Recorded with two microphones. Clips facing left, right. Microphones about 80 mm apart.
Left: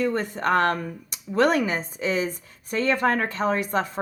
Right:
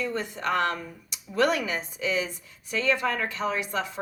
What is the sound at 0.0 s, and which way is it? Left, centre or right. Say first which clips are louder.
Speech: left 5 dB; left.